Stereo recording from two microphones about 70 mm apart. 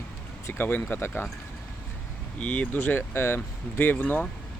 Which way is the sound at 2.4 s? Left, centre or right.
Left.